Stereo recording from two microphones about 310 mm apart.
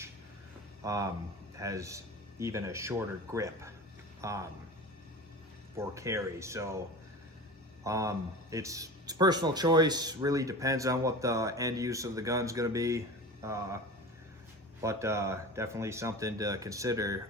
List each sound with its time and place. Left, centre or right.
0.9 s a man's voice: centre
5.7 s a man's voice: centre
7.9 s a man's voice: centre
14.8 s a man's voice: centre